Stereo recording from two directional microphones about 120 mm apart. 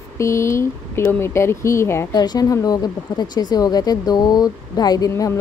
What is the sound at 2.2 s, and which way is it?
A woman's voice, 35° left (ahead or behind).